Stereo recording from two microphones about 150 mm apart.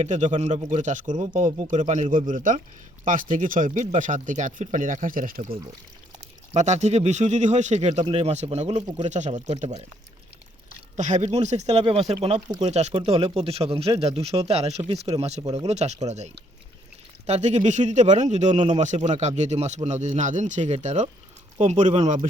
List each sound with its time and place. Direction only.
0.0 s speech: 55° right (ahead or behind)
6.5 s speech: 50° right (ahead or behind)
10.9 s speech: 50° right (ahead or behind)